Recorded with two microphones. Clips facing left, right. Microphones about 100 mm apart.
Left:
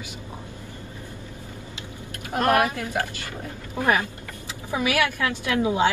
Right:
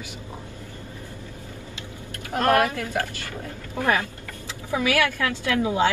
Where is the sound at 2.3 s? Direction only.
20° left (ahead or behind).